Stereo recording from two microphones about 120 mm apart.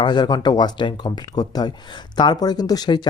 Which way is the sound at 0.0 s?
35° left (ahead or behind).